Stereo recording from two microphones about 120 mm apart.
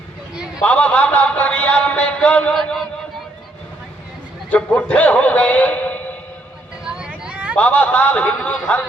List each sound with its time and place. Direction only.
0.6 s a man's voice: 10° left (ahead or behind)
4.5 s a man's voice: 10° left (ahead or behind)
6.8 s vehicle: 10° right (ahead or behind)
7.5 s a man's voice: 10° left (ahead or behind)